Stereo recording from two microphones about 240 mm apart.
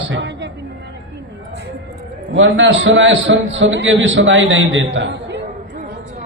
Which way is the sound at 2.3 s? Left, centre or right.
Right.